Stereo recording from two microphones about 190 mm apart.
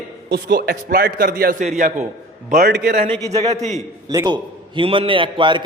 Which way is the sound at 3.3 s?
35° right (ahead or behind).